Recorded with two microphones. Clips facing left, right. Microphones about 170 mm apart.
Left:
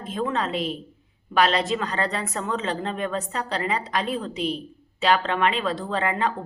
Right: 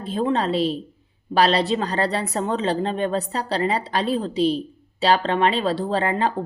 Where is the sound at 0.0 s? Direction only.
30° right (ahead or behind).